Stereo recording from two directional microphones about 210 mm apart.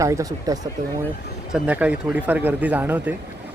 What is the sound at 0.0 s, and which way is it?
Speech, 15° right (ahead or behind).